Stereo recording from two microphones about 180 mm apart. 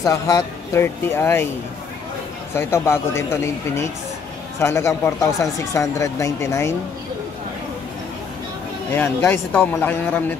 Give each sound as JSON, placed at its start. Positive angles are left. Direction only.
{"t": 0.0, "sound": "speech", "side_deg": 15}
{"t": 2.5, "sound": "speech", "side_deg": 15}
{"t": 8.9, "sound": "speech", "side_deg": 10}